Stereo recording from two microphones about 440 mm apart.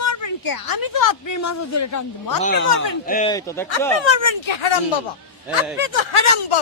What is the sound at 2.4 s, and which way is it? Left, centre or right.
Speech, centre.